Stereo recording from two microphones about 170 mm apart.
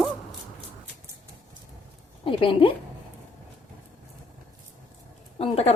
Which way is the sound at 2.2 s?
30° left (ahead or behind).